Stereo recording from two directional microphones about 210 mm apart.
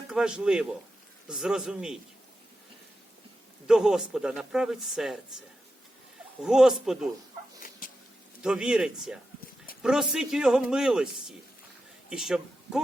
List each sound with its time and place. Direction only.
0.1 s a man's voice: 5° right (ahead or behind)
3.7 s a man's voice: 5° right (ahead or behind)
6.4 s a man's voice: centre (ahead or behind)
7.8 s a sound: 40° left (ahead or behind)
8.4 s a man's voice: 5° right (ahead or behind)